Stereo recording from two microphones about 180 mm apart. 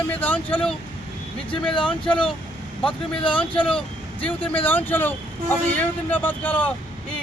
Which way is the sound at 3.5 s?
30° left (ahead or behind).